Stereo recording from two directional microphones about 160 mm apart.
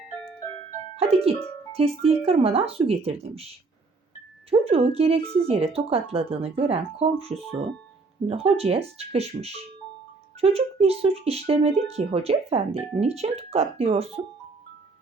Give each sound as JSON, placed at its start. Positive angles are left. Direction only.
{"t": 0.9, "sound": "speech", "side_deg": -40}
{"t": 4.5, "sound": "speech", "side_deg": -40}